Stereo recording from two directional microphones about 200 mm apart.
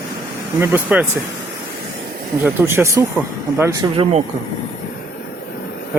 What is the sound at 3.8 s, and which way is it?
Speech, 30° right (ahead or behind).